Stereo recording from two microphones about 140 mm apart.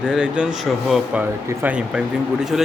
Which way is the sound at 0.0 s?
5° right (ahead or behind).